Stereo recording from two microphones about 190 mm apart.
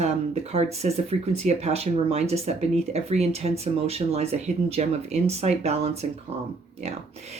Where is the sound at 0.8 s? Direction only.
40° right (ahead or behind).